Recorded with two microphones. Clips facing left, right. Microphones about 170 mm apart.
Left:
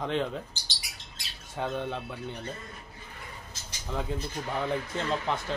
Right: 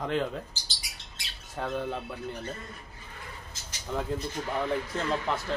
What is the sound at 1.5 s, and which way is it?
Speech, centre (ahead or behind).